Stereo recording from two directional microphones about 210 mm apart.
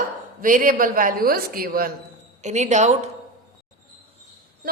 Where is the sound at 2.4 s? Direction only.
35° right (ahead or behind).